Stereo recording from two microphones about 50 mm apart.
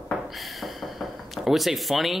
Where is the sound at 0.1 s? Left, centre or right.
Centre.